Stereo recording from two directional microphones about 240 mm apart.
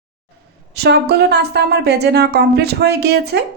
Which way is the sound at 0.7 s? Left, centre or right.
Right.